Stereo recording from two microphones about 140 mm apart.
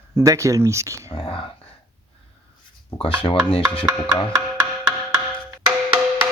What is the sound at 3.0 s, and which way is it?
Chopping, 40° left (ahead or behind).